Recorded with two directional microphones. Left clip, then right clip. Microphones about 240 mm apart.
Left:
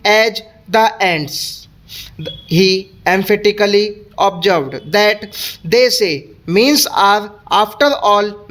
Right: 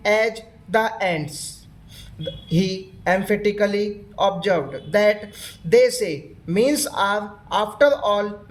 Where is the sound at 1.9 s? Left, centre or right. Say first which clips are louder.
Left 5 dB; left.